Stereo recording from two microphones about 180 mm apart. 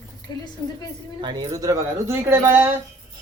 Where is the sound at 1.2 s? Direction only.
25° right (ahead or behind).